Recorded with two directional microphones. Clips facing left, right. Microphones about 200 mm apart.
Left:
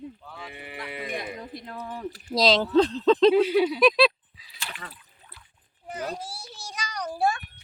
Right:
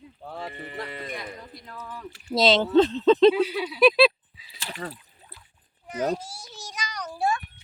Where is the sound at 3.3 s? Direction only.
50° left (ahead or behind).